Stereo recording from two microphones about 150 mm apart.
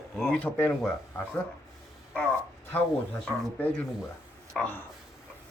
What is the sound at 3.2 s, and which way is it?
Speech, 10° left (ahead or behind).